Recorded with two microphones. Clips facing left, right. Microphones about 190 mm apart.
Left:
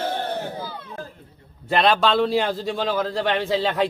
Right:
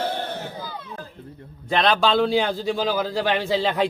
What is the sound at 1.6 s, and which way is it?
A man's voice, 5° left (ahead or behind).